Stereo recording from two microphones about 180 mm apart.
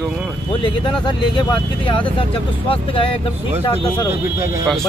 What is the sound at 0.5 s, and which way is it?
Speech, 25° left (ahead or behind).